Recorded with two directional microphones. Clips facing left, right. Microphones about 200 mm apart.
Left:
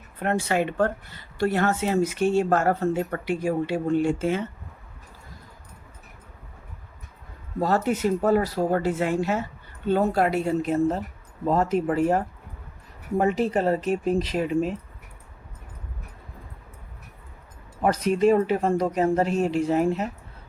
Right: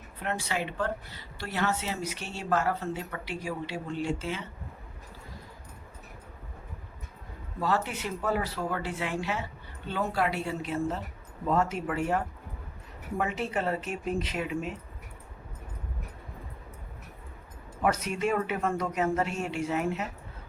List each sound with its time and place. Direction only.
0.2 s speech: 50° left (ahead or behind)
7.6 s speech: 45° left (ahead or behind)
17.8 s speech: 35° left (ahead or behind)